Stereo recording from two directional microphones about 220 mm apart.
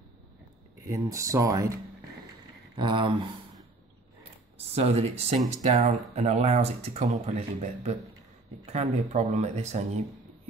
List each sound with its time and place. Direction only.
0.8 s speech: 15° right (ahead or behind)
4.6 s speech: 30° right (ahead or behind)